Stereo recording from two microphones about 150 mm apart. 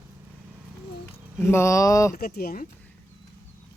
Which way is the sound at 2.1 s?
90° left.